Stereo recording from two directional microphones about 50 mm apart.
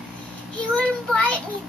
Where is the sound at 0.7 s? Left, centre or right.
Left.